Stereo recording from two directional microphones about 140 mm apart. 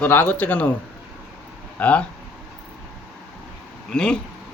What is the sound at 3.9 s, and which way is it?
Speech, 5° left (ahead or behind).